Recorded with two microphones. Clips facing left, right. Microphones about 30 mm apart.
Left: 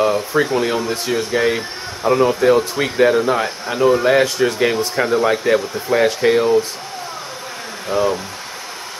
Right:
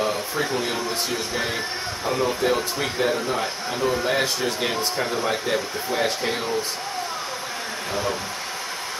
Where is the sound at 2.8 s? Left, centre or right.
Left.